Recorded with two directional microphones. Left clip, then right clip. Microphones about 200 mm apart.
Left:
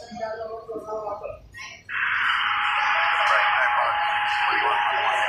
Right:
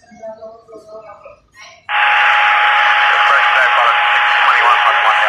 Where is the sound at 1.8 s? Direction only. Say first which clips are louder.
Right 12 dB; 40° right (ahead or behind).